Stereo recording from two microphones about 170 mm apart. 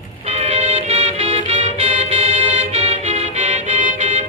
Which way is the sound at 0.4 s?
40° right (ahead or behind).